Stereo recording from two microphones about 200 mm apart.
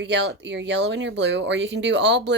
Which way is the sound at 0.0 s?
60° right (ahead or behind).